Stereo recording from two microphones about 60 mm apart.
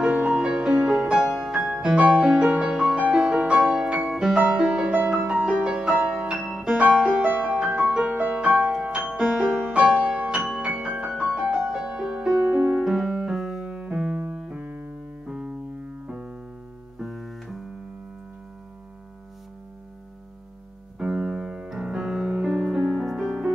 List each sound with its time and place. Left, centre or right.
0.0 s music: centre
2.0 s music: right
4.0 s music: centre
4.4 s music: centre
7.2 s music: right
7.6 s music: centre
13.7 s keyboard: centre
16.1 s piano: centre
17.0 s music: centre
21.0 s piano: centre
22.5 s music: centre